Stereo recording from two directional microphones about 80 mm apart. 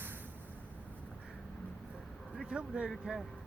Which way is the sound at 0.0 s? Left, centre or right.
Right.